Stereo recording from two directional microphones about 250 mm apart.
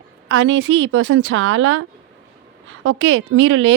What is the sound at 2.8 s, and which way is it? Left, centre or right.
Speech, right.